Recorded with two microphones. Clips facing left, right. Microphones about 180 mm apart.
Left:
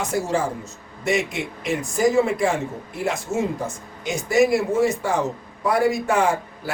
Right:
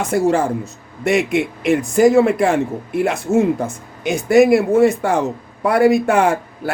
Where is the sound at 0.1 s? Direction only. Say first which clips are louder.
Right 10 dB; 60° right (ahead or behind).